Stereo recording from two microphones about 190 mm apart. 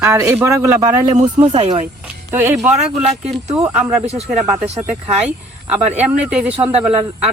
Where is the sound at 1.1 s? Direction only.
40° right (ahead or behind).